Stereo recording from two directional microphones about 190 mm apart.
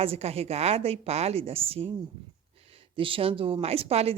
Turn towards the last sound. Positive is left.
turn(degrees=-30)  # may be behind; listen again after turning